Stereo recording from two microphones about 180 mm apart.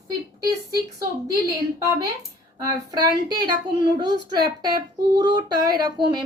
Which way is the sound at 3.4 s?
25° right (ahead or behind).